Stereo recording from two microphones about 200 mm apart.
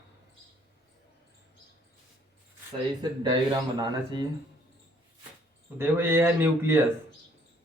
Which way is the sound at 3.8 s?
20° right (ahead or behind).